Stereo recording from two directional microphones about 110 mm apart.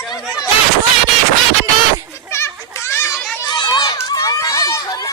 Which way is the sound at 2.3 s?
25° left (ahead or behind).